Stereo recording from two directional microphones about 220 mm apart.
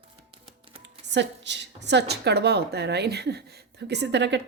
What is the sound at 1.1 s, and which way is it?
A woman's voice, 50° right (ahead or behind).